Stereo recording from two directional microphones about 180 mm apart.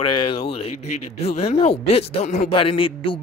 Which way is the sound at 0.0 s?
30° left (ahead or behind).